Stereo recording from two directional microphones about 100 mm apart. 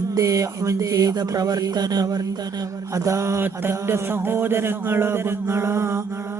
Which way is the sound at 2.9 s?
30° right (ahead or behind).